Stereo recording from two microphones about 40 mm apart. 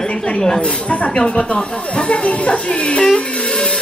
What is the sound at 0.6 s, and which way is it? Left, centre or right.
Speech, left.